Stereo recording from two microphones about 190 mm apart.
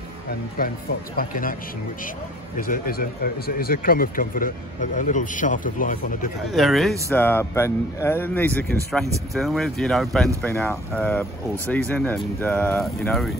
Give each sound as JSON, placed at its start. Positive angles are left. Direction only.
{"t": 1.1, "sound": "speech", "side_deg": 50}
{"t": 2.6, "sound": "speech", "side_deg": 50}
{"t": 6.5, "sound": "speech", "side_deg": 0}
{"t": 7.1, "sound": "speech", "side_deg": 10}